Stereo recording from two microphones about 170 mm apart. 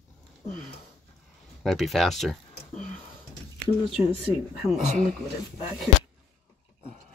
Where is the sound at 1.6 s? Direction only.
Centre (ahead or behind).